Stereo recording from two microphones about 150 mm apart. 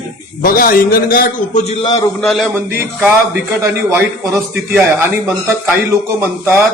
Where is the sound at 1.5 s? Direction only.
45° left (ahead or behind).